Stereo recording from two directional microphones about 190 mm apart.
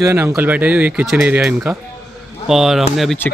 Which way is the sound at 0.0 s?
15° right (ahead or behind).